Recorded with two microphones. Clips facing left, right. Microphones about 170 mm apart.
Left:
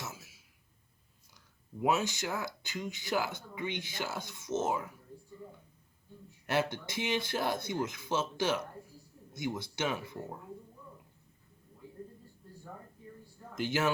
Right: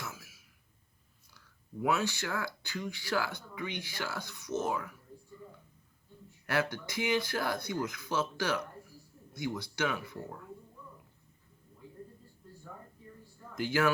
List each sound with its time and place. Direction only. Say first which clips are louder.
0.0 s a sound: even; 25° left (ahead or behind)
1.8 s speech: left 1 dB; 20° left (ahead or behind)
6.5 s speech: left 1 dB; 25° left (ahead or behind)
13.6 s speech: right 2 dB; 20° left (ahead or behind)